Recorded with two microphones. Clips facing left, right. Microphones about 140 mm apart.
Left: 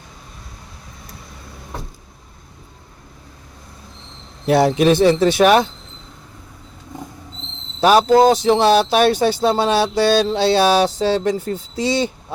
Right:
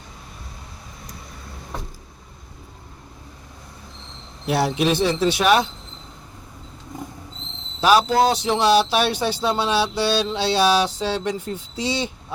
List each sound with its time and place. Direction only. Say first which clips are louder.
4.4 s speech: left 7 dB; 50° left (ahead or behind)
7.9 s speech: left 5 dB; 45° left (ahead or behind)